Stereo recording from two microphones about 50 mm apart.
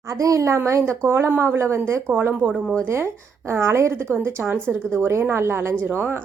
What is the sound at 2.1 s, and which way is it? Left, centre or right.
Speech, right.